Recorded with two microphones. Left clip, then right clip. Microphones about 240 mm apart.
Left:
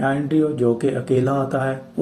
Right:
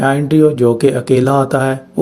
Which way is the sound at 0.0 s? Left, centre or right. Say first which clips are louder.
Right 8 dB; right.